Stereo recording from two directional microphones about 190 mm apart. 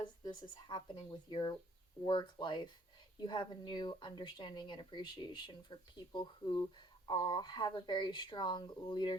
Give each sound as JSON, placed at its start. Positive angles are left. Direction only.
{"t": 0.0, "sound": "speech", "side_deg": 25}